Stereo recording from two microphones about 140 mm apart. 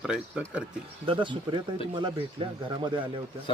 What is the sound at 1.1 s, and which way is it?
Speech, 35° right (ahead or behind).